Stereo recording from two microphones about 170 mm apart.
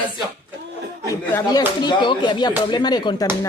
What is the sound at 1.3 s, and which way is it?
Speech, 20° left (ahead or behind).